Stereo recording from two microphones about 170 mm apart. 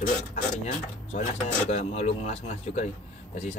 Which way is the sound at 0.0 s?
45° left (ahead or behind).